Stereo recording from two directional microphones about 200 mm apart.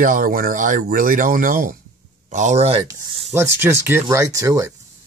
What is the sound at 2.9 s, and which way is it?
Speech, 15° right (ahead or behind).